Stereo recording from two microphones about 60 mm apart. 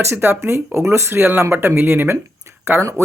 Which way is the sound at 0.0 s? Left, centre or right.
Right.